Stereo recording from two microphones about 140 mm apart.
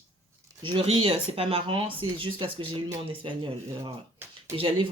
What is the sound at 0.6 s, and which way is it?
Speech, 40° right (ahead or behind).